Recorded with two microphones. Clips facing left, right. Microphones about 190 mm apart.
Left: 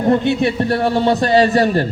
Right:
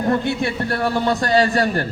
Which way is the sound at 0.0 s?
20° left (ahead or behind).